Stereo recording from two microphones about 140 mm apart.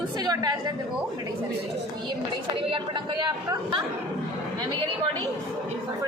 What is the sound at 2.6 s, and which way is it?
Speech, 35° right (ahead or behind).